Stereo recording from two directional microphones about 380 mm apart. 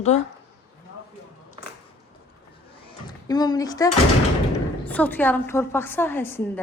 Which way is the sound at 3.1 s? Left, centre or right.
Centre.